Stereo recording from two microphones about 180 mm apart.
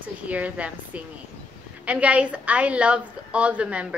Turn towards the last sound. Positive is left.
turn(degrees=-5)  # may be behind; listen again after turning